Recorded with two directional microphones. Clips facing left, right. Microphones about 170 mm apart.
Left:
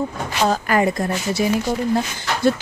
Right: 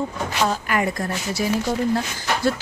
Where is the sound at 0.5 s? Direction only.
40° left (ahead or behind).